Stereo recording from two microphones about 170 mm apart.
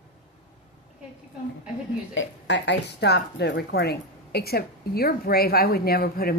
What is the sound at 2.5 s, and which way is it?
A woman's voice, 85° left.